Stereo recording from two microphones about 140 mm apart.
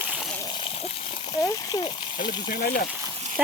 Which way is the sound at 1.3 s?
25° left (ahead or behind).